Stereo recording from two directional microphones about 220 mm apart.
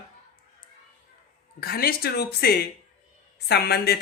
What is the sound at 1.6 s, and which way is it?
Speech, 45° left (ahead or behind).